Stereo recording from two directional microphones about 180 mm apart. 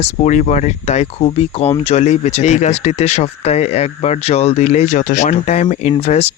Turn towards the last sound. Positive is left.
turn(degrees=35)  # may be behind; listen again after turning